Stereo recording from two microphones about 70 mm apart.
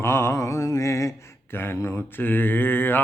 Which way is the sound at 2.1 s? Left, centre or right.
Left.